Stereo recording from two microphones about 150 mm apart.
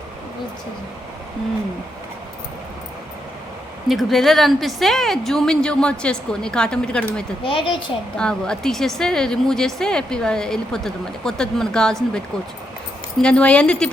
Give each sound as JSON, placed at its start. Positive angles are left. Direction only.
{"t": 3.8, "sound": "speech", "side_deg": 0}
{"t": 7.4, "sound": "speech", "side_deg": 35}
{"t": 8.2, "sound": "speech", "side_deg": 5}
{"t": 13.2, "sound": "speech", "side_deg": 5}